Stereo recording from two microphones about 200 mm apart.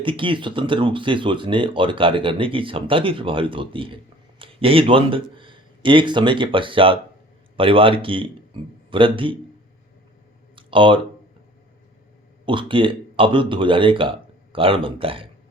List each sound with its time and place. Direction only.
0.0 s speech: 25° right (ahead or behind)
10.5 s a sound: 25° right (ahead or behind)
12.5 s speech: 25° right (ahead or behind)